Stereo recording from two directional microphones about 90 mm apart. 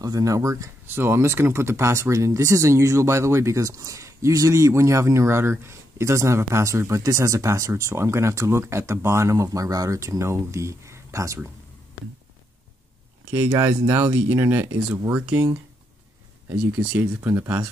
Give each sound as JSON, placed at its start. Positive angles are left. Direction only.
{"t": 0.0, "sound": "speech", "side_deg": -40}
{"t": 13.5, "sound": "speech", "side_deg": -30}
{"t": 16.4, "sound": "speech", "side_deg": -25}